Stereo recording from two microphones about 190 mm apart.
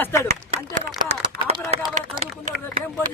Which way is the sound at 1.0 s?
30° right (ahead or behind).